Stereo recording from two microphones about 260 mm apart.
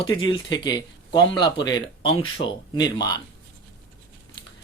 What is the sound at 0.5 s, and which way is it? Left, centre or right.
Speech, centre.